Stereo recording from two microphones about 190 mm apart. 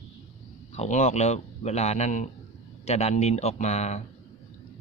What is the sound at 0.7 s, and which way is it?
Speech, 35° left (ahead or behind).